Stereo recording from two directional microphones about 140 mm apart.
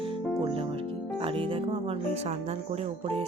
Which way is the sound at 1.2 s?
40° right (ahead or behind).